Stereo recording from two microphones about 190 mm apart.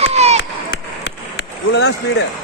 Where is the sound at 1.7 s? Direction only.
60° left (ahead or behind).